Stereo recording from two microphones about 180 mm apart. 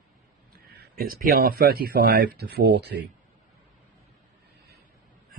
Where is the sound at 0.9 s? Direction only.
55° right (ahead or behind).